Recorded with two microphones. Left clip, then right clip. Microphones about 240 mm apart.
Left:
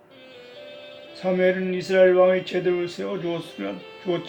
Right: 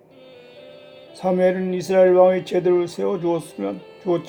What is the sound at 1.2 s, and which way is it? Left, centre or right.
Speech, right.